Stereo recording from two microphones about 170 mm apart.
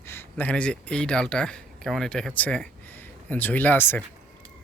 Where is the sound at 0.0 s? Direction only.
15° left (ahead or behind).